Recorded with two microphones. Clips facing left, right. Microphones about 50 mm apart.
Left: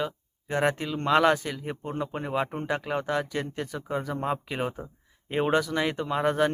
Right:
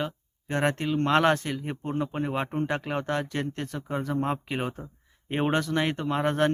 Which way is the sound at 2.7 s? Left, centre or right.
Centre.